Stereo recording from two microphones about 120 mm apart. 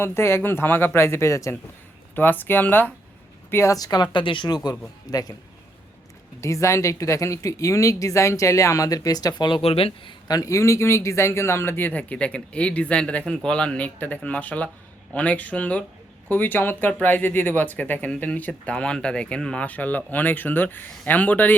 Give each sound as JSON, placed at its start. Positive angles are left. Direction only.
{"t": 0.0, "sound": "speech", "side_deg": 20}
{"t": 3.5, "sound": "speech", "side_deg": 25}
{"t": 6.4, "sound": "speech", "side_deg": 25}
{"t": 9.6, "sound": "speech", "side_deg": 55}